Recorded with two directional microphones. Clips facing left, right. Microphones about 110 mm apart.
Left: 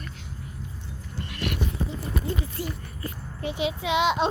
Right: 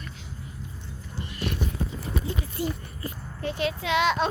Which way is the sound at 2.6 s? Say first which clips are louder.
Right 3 dB; 20° right (ahead or behind).